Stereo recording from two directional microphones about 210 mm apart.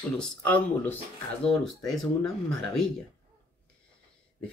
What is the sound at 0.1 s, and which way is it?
Speech, 5° left (ahead or behind).